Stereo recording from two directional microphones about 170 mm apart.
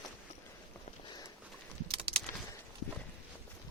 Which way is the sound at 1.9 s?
35° right (ahead or behind).